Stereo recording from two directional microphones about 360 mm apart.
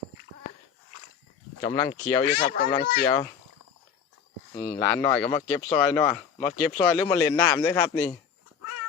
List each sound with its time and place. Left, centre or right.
1.6 s speech: centre
2.5 s speech: left
2.7 s speech: centre
4.5 s speech: centre